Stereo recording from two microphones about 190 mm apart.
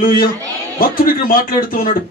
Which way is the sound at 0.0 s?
50° left (ahead or behind).